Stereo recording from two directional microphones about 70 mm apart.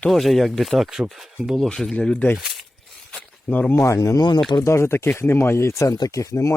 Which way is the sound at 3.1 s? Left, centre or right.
Centre.